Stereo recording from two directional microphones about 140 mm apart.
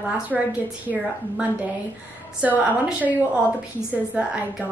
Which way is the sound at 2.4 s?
10° right (ahead or behind).